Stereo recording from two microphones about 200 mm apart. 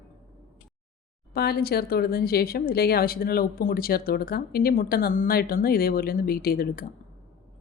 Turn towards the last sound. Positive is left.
turn(degrees=50)  # may be behind; listen again after turning